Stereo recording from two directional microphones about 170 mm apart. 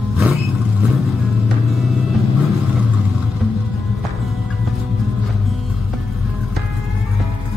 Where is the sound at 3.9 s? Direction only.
Centre (ahead or behind).